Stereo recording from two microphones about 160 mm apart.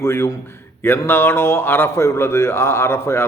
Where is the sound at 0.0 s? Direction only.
15° left (ahead or behind).